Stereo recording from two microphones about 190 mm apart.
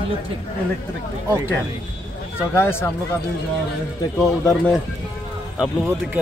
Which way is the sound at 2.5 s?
15° left (ahead or behind).